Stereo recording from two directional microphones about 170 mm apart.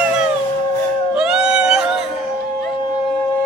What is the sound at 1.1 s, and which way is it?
Music, 5° right (ahead or behind).